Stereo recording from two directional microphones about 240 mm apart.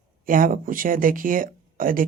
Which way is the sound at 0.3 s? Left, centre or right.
Right.